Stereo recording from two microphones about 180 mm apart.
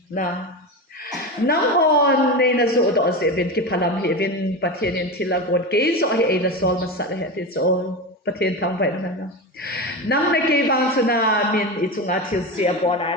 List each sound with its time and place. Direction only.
1.5 s speech: 60° left (ahead or behind)
12.5 s speech: 35° left (ahead or behind)